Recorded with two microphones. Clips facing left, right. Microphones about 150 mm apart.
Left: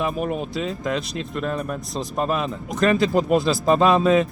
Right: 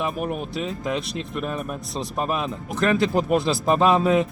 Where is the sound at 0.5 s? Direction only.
Centre (ahead or behind).